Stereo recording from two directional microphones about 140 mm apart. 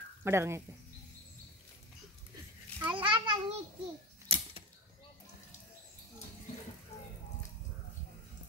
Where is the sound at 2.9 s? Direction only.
35° right (ahead or behind).